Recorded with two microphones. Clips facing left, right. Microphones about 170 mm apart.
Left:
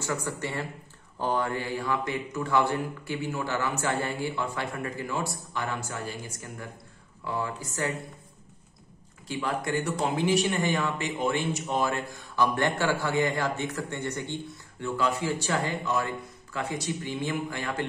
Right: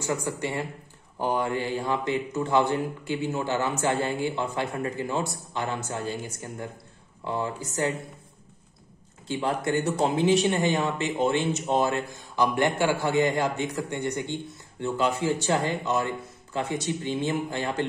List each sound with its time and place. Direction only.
0.0 s a man's voice: 15° right (ahead or behind)
9.3 s a man's voice: 25° right (ahead or behind)